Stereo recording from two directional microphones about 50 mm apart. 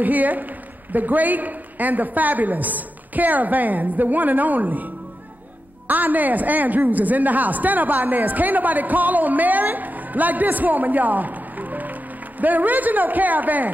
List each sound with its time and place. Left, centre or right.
0.0 s a woman's voice: right